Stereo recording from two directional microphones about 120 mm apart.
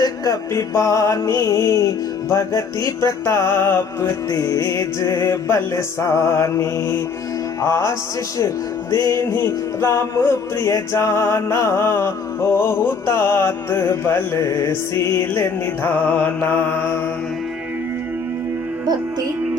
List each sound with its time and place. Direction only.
0.0 s music: 25° left (ahead or behind)